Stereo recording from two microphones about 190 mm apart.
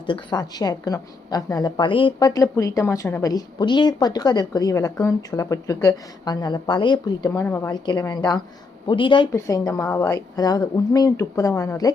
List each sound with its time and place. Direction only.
0.0 s a woman's voice: 25° left (ahead or behind)